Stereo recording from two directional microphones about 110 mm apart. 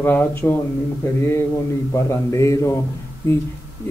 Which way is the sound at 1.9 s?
30° left (ahead or behind).